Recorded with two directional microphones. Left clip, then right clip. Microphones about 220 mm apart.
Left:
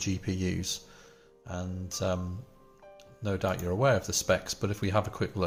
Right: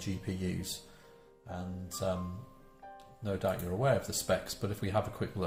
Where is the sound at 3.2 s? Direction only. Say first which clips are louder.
Left 3 dB; 45° left (ahead or behind).